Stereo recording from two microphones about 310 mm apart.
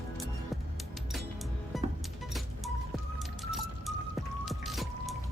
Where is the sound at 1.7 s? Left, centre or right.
Centre.